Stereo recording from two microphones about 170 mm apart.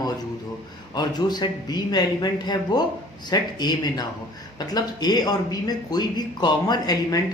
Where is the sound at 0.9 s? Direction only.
25° left (ahead or behind).